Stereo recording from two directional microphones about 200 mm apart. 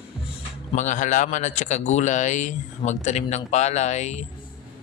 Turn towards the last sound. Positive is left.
turn(degrees=35)  # may be behind; listen again after turning